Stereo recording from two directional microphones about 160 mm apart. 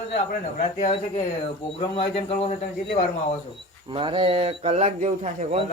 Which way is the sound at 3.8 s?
30° right (ahead or behind).